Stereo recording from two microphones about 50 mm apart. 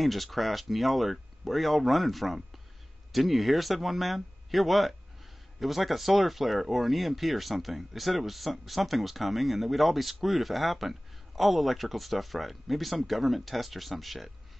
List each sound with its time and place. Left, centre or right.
0.0 s speech: centre